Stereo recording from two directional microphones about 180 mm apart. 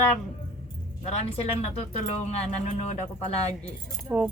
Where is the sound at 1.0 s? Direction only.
35° left (ahead or behind).